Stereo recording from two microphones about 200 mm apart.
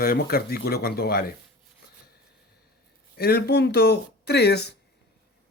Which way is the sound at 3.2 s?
50° left (ahead or behind).